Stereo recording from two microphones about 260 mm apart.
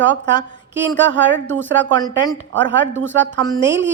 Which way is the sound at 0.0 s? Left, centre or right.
Right.